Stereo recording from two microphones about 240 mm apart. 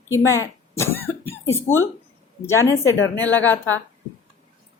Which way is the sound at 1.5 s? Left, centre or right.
Centre.